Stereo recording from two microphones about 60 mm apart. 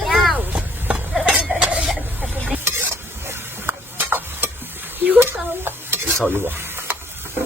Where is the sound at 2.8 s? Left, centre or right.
Right.